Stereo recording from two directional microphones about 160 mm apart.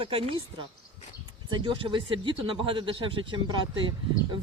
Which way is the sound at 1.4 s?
30° right (ahead or behind).